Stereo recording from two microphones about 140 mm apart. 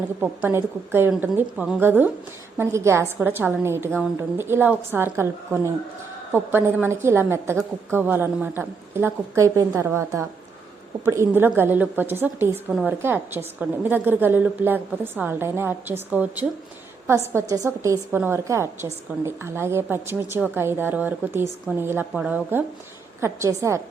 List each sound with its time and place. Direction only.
0.2 s a woman's voice: 15° right (ahead or behind)